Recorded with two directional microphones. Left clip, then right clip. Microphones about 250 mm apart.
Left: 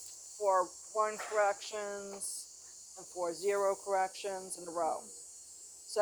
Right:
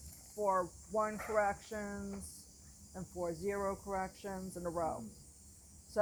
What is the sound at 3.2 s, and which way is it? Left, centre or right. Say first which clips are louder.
Speech: left 6 dB; left.